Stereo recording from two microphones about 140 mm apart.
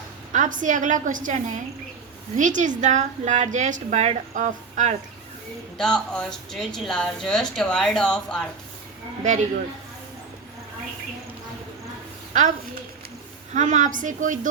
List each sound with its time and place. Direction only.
0.3 s a woman's voice: 65° right (ahead or behind)
5.7 s speech: 5° left (ahead or behind)
12.3 s a woman's voice: 60° right (ahead or behind)